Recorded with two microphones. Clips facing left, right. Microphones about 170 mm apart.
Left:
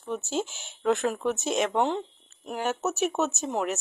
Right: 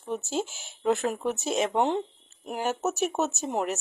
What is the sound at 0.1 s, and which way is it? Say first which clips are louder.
Speech: even; 45° right (ahead or behind).